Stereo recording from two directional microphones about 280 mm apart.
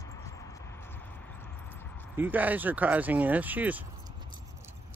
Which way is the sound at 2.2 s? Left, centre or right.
Centre.